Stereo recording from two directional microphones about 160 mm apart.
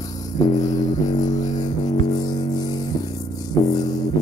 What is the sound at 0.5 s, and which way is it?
Music, 25° left (ahead or behind).